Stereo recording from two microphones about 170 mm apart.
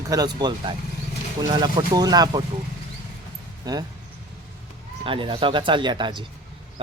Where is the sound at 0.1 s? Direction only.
25° right (ahead or behind).